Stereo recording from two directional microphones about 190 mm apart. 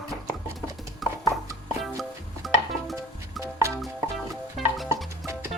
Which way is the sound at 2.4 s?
Centre (ahead or behind).